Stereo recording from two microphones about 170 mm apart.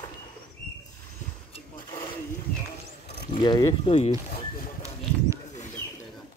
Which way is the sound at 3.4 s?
25° left (ahead or behind).